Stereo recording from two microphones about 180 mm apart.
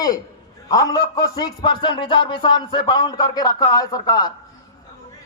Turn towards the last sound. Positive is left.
turn(degrees=20)  # may be behind; listen again after turning